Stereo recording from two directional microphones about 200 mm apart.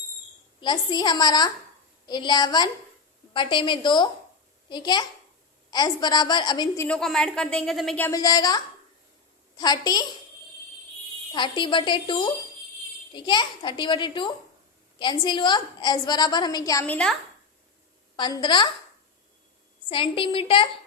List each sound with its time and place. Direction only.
0.6 s a woman's voice: 20° left (ahead or behind)
6.8 s a woman's voice: 5° left (ahead or behind); by 10.1 s 20° left (ahead or behind)
11.3 s a woman's voice: 25° left (ahead or behind); by 17.2 s 5° left (ahead or behind)
18.2 s a woman's voice: 20° left (ahead or behind)
19.9 s a woman's voice: 25° left (ahead or behind)